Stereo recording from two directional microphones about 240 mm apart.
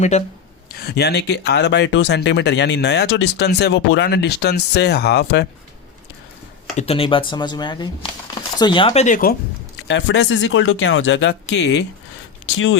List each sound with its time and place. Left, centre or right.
0.1 s speech: left
0.7 s speech: left
6.7 s speech: left
9.8 s speech: left